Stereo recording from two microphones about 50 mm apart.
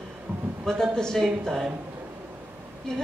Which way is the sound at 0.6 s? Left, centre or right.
Centre.